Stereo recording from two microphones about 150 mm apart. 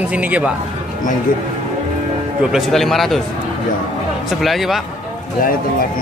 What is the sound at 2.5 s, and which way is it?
Speech, centre (ahead or behind).